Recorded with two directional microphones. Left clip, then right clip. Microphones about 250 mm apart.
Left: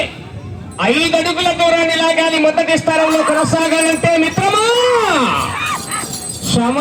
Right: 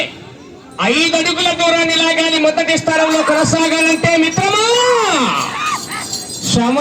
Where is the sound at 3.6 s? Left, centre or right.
Right.